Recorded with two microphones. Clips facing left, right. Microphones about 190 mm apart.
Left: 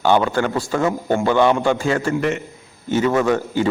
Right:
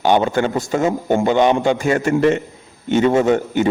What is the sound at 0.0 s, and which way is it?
A man's voice, 20° right (ahead or behind).